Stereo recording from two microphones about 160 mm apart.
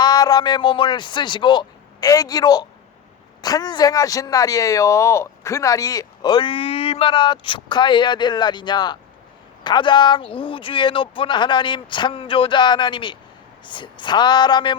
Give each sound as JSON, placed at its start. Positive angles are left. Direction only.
{"t": 0.0, "sound": "a man's voice", "side_deg": 25}